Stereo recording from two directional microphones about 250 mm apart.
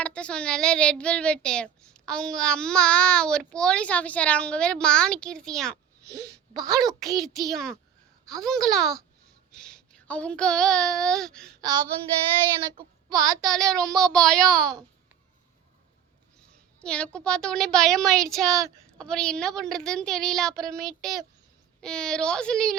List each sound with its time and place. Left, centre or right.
0.0 s speech: centre
6.1 s speech: centre
7.2 s speech: centre
9.5 s child singing: centre
13.1 s child singing: centre
13.4 s speech: centre
16.8 s speech: centre